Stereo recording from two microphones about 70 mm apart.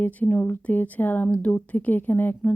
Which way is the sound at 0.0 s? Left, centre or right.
Left.